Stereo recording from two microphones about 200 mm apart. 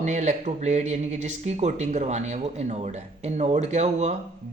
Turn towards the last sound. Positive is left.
turn(degrees=-35)  # may be behind; listen again after turning